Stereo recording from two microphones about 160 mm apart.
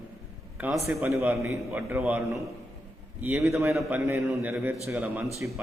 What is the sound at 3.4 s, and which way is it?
Speech, 20° right (ahead or behind).